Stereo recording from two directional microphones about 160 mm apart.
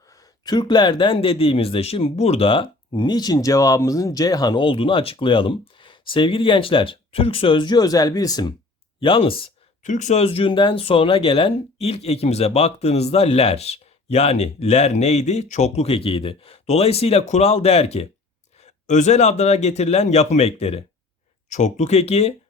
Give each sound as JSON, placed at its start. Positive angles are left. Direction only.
{"t": 0.1, "sound": "speech", "side_deg": 25}
{"t": 9.8, "sound": "a man's voice", "side_deg": 50}